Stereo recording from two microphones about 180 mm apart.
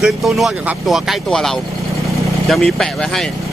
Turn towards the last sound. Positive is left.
turn(degrees=0)  # may be behind; listen again after turning